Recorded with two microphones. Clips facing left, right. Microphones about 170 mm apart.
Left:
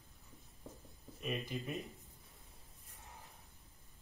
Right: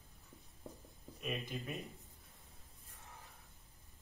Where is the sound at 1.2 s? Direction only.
Centre (ahead or behind).